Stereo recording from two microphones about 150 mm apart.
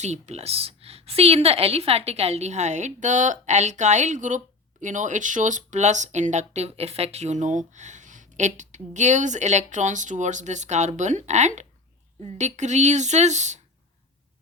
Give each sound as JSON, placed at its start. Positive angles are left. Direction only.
{"t": 0.0, "sound": "speech", "side_deg": -50}